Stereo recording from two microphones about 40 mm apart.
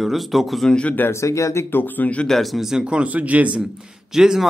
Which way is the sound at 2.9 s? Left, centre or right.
Right.